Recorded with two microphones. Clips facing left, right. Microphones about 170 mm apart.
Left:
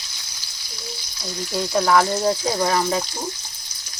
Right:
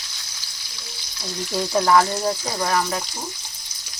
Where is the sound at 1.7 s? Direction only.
5° right (ahead or behind).